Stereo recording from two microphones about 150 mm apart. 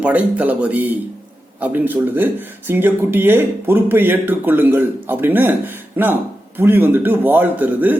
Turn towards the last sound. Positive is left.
turn(degrees=-10)  # may be behind; listen again after turning